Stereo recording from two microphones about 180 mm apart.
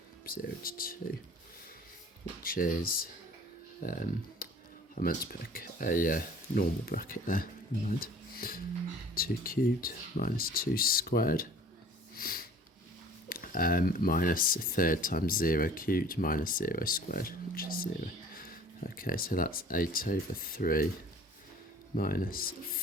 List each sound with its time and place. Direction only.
0.3 s speech: 55° left (ahead or behind)
2.4 s speech: 50° left (ahead or behind)
12.1 s a sound: 55° left (ahead or behind)
13.2 s speech: 50° left (ahead or behind)
21.9 s speech: 55° left (ahead or behind)